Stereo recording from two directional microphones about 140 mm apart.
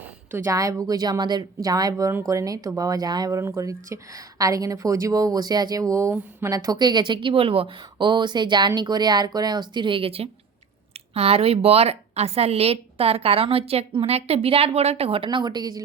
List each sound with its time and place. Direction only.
0.0 s a woman's voice: 15° right (ahead or behind)